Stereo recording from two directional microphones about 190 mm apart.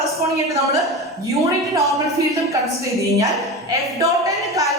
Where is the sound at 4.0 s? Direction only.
15° right (ahead or behind).